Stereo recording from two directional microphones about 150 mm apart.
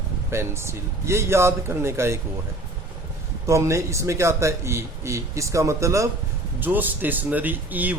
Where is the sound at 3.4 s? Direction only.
20° right (ahead or behind).